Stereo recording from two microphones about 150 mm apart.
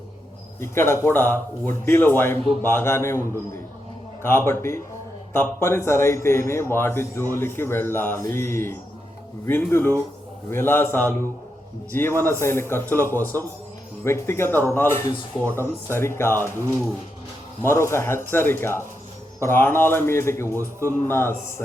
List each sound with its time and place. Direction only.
0.6 s a man's voice: 15° left (ahead or behind)
17.7 s a man's voice: 15° left (ahead or behind)